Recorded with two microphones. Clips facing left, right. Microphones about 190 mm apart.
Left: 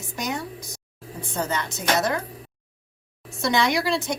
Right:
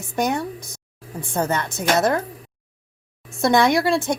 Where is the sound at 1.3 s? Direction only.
55° right (ahead or behind).